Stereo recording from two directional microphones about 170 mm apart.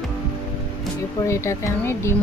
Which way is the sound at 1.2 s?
15° left (ahead or behind).